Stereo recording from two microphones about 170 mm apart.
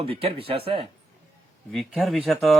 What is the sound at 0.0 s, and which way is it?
Speech, 35° right (ahead or behind).